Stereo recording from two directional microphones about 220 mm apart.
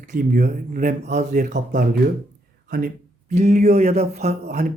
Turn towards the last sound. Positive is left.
turn(degrees=-30)  # may be behind; listen again after turning